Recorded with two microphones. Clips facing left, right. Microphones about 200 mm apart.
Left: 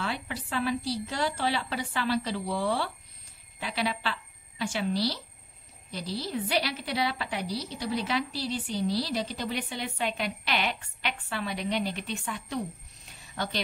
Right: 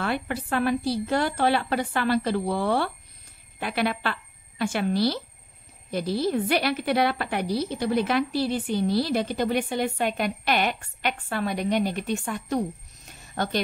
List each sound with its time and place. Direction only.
0.0 s a woman's voice: 55° right (ahead or behind)